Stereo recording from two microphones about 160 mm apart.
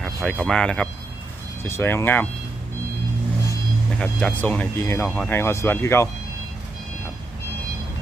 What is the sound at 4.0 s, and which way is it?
Speech, 5° left (ahead or behind).